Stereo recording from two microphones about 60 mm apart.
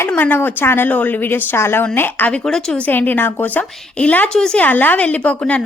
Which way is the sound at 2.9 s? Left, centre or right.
Left.